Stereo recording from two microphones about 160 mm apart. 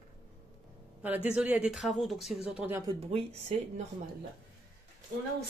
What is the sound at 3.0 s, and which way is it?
Speech, 40° right (ahead or behind).